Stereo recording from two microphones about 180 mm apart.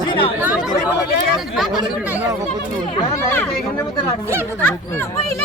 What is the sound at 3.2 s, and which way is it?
Speech, 15° left (ahead or behind).